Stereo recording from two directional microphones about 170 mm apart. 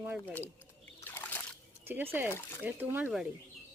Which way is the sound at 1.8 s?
15° right (ahead or behind).